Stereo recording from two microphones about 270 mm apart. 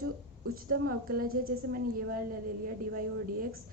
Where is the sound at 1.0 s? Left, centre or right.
Right.